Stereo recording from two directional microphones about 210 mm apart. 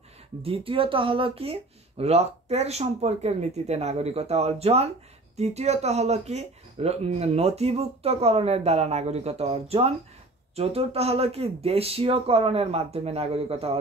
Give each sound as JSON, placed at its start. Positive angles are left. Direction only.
{"t": 0.4, "sound": "speech", "side_deg": -25}